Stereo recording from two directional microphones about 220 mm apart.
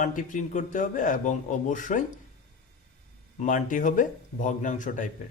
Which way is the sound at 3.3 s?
35° left (ahead or behind).